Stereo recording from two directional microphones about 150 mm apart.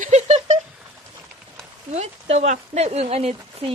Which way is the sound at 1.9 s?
45° right (ahead or behind).